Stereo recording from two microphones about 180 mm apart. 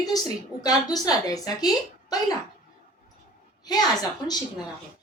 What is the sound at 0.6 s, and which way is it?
Speech, 20° left (ahead or behind).